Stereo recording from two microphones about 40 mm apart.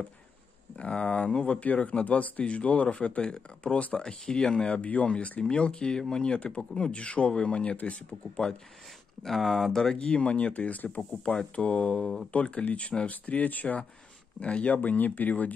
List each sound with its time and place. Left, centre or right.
0.7 s speech: left
4.7 s speech: left
9.2 s speech: centre
9.9 s speech: left